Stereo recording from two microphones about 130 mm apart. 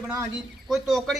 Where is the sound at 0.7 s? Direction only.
Centre (ahead or behind).